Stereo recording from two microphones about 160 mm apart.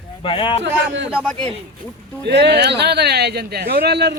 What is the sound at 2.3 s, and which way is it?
Speech, 90° right.